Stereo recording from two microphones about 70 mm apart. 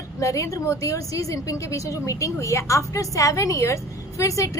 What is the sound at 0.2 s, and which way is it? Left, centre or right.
A woman's voice, left.